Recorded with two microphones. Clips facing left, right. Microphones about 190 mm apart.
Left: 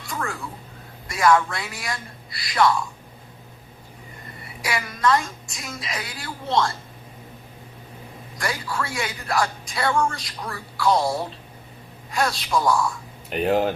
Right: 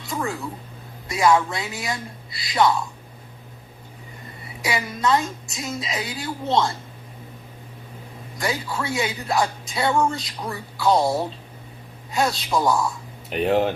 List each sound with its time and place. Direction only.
0.1 s a woman's voice: 20° right (ahead or behind)
4.6 s a woman's voice: 25° right (ahead or behind)
8.4 s a woman's voice: 20° right (ahead or behind)
13.3 s speech: centre (ahead or behind)